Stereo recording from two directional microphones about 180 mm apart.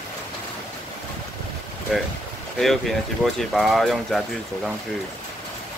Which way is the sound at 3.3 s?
Centre (ahead or behind).